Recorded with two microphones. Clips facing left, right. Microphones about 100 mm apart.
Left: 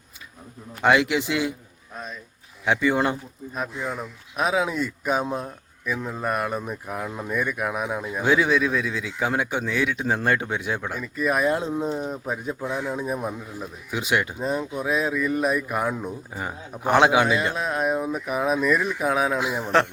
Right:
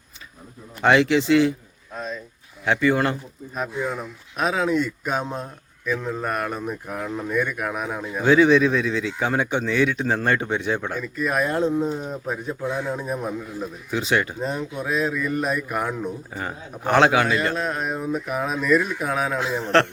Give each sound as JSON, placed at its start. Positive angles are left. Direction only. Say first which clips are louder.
{"t": 0.8, "sound": "speech", "louder": "right 2 dB", "side_deg": 10}
{"t": 2.6, "sound": "speech", "louder": "right 1 dB", "side_deg": 15}
{"t": 4.4, "sound": "speech", "louder": "right 2 dB", "side_deg": 10}